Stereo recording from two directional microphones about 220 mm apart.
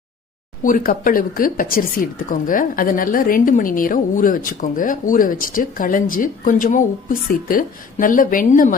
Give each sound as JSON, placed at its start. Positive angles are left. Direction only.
{"t": 0.6, "sound": "speech", "side_deg": 40}